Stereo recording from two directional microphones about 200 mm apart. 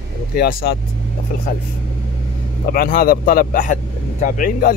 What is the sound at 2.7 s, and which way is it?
Speech, 50° left (ahead or behind).